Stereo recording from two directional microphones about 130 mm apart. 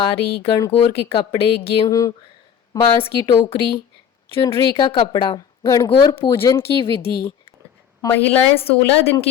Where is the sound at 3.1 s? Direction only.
25° left (ahead or behind).